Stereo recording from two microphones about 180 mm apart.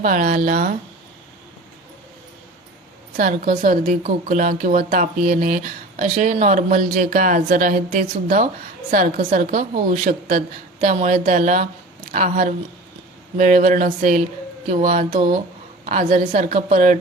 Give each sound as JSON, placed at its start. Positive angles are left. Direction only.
{"t": 0.0, "sound": "speech", "side_deg": -50}
{"t": 3.2, "sound": "speech", "side_deg": -50}